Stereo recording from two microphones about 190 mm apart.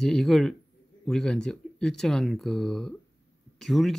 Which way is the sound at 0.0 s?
Centre (ahead or behind).